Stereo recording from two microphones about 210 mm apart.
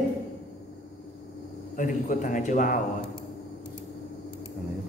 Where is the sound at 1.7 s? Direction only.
40° left (ahead or behind).